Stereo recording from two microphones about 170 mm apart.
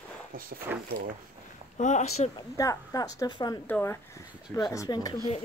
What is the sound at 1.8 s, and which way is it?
Speech, 45° left (ahead or behind).